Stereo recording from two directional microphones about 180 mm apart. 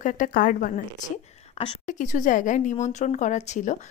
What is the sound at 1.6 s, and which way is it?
Speech, 35° left (ahead or behind).